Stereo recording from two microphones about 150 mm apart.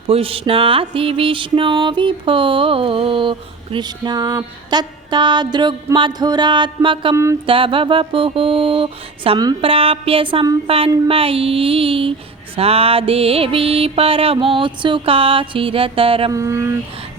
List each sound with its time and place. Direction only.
0.1 s music: 40° right (ahead or behind)
16.3 s speech: 20° right (ahead or behind)